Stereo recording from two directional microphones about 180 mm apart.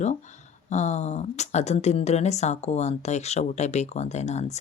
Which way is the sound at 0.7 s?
40° left (ahead or behind).